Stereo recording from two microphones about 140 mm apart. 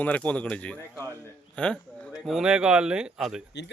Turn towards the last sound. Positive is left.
turn(degrees=-5)  # may be behind; listen again after turning